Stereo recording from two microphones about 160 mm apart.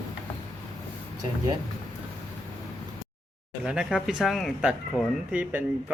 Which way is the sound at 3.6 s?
5° right (ahead or behind).